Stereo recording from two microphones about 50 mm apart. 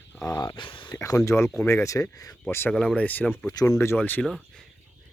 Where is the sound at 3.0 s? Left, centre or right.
Left.